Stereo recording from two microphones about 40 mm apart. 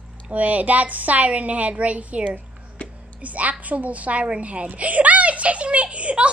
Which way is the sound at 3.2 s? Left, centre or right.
Right.